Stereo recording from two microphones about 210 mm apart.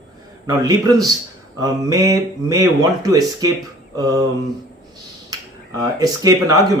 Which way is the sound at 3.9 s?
15° right (ahead or behind).